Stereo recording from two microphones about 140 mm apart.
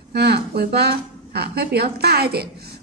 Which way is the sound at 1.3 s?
90° right.